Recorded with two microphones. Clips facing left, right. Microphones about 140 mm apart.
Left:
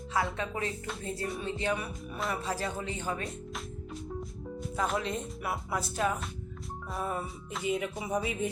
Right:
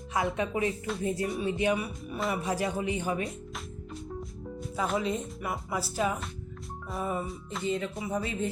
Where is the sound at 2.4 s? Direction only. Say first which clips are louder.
Right 4 dB; 15° right (ahead or behind).